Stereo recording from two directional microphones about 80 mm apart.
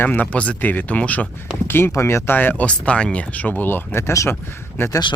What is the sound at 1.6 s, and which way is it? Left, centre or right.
Speech, left.